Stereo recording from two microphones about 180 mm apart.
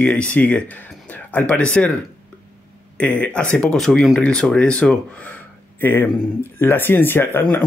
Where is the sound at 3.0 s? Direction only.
5° left (ahead or behind).